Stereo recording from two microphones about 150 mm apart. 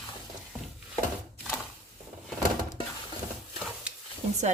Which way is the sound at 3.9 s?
5° right (ahead or behind).